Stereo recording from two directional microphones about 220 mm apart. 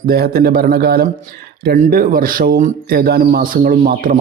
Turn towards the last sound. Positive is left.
turn(degrees=-40)  # may be behind; listen again after turning